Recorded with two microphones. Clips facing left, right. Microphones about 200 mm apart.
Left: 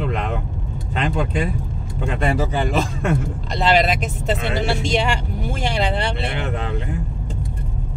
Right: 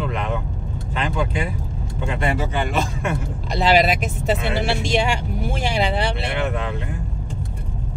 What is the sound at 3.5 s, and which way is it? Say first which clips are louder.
Speech: right 1 dB; 5° right (ahead or behind).